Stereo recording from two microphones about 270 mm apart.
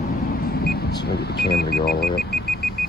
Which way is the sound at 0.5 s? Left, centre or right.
Left.